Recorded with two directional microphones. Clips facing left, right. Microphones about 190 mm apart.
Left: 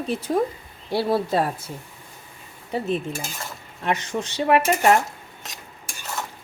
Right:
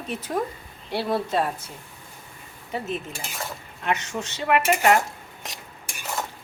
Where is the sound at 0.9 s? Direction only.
35° left (ahead or behind).